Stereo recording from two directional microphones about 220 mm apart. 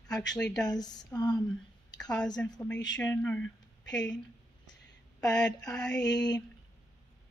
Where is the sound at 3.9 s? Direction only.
55° left (ahead or behind).